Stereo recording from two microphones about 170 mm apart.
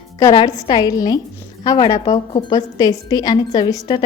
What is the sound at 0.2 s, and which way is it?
A woman's voice, 20° left (ahead or behind).